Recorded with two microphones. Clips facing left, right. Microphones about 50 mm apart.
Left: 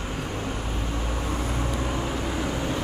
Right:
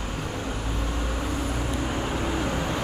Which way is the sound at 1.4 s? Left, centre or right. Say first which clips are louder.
Even; left.